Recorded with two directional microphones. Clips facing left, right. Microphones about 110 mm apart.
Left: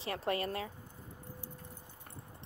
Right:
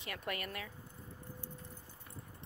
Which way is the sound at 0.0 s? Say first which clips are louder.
Left 7 dB; 30° left (ahead or behind).